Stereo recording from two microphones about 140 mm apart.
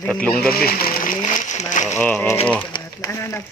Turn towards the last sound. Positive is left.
turn(degrees=20)  # may be behind; listen again after turning